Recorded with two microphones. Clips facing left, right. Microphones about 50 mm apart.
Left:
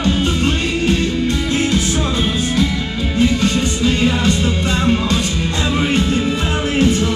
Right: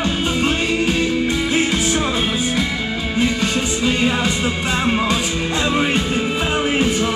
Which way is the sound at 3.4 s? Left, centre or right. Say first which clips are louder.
Left 3 dB; centre.